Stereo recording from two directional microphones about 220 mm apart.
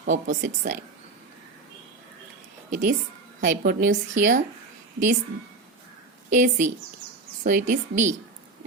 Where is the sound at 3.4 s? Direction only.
40° right (ahead or behind).